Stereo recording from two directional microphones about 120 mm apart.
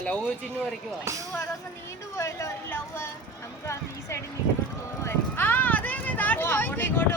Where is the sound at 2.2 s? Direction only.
25° left (ahead or behind).